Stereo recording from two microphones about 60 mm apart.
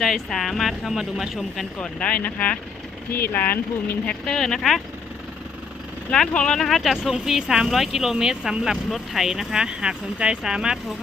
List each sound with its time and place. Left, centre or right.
0.0 s speech: centre
1.8 s speech: left
4.3 s speech: centre
6.1 s speech: centre